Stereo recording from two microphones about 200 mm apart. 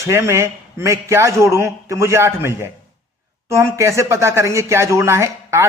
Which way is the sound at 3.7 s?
15° right (ahead or behind).